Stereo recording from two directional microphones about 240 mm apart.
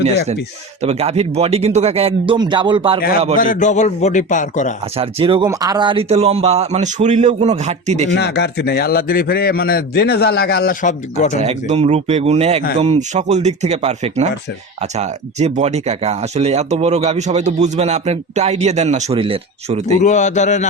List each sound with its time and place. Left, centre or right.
0.8 s speech: right
3.3 s a man's voice: left
4.9 s speech: right
8.1 s a man's voice: left
11.3 s speech: right
20.0 s a man's voice: left